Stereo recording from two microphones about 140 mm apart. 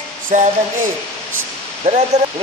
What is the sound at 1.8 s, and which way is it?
Speech, 50° right (ahead or behind).